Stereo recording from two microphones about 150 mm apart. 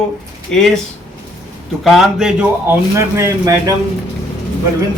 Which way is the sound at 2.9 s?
20° right (ahead or behind).